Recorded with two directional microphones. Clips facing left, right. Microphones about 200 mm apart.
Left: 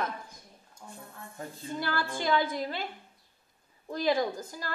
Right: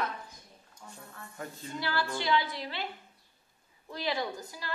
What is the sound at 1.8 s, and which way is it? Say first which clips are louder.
A woman's voice: even; 50° left (ahead or behind).